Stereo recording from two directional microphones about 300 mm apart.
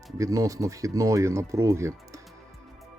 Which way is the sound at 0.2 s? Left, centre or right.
Centre.